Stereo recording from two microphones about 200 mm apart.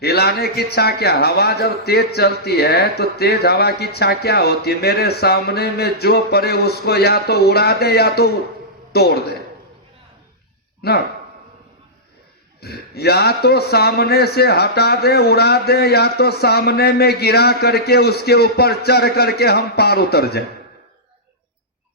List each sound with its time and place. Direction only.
0.0 s a man's voice: 55° left (ahead or behind)
10.8 s a man's voice: 55° left (ahead or behind)
12.5 s a man's voice: 55° left (ahead or behind)